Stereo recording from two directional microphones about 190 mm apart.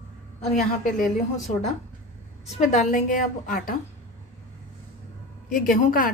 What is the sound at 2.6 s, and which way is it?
A woman's voice, 40° left (ahead or behind).